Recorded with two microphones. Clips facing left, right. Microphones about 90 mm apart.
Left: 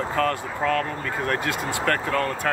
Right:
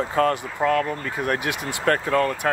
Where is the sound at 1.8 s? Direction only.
30° right (ahead or behind).